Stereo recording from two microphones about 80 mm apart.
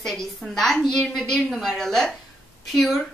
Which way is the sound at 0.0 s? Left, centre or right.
Centre.